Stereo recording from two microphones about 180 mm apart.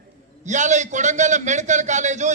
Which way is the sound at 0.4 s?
40° right (ahead or behind).